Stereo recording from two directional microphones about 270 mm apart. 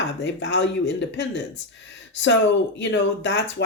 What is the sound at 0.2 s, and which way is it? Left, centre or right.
Speech, left.